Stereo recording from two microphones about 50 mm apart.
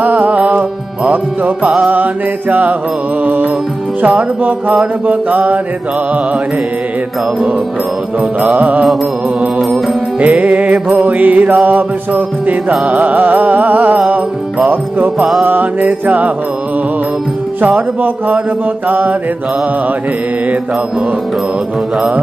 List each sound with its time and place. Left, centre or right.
0.0 s music: right
4.0 s music: right
8.5 s music: right
10.2 s music: right
13.9 s music: right
15.1 s music: centre
15.4 s music: right
17.6 s music: right